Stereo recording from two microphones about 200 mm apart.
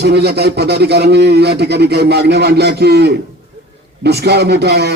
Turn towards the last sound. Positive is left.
turn(degrees=-55)  # may be behind; listen again after turning